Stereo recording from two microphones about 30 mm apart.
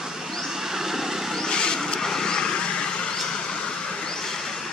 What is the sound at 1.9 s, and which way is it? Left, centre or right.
Vehicle, centre.